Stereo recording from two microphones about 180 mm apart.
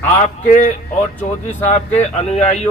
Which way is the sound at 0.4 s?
45° left (ahead or behind).